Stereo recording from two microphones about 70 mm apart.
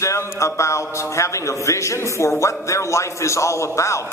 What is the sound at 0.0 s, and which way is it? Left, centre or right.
Speech, left.